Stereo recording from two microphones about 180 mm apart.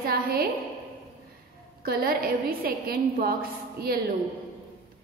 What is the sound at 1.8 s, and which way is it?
A woman's voice, 55° right (ahead or behind).